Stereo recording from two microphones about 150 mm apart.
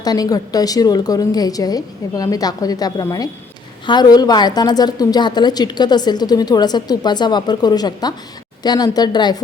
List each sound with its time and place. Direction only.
0.0 s a woman's voice: 25° left (ahead or behind)